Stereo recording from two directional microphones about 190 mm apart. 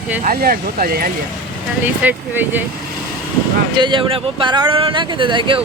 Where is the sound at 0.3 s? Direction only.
50° right (ahead or behind).